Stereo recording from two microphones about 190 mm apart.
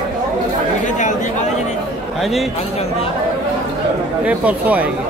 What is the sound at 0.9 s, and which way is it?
Chatter, 40° left (ahead or behind).